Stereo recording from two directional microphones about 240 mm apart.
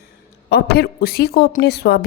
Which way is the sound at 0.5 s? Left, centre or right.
Left.